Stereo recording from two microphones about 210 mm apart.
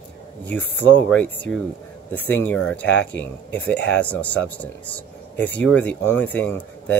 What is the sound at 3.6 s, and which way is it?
Speech, 55° left (ahead or behind).